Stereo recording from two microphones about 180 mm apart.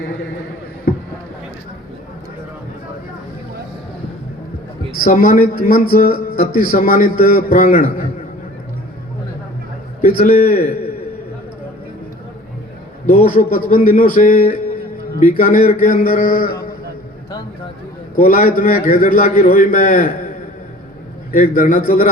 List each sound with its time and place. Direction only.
0.9 s a sound: 55° left (ahead or behind)
5.0 s a man's voice: 50° left (ahead or behind)
10.0 s a man's voice: 45° left (ahead or behind)
13.1 s a man's voice: 50° left (ahead or behind)
18.2 s a man's voice: 50° left (ahead or behind)
21.3 s a man's voice: 45° left (ahead or behind)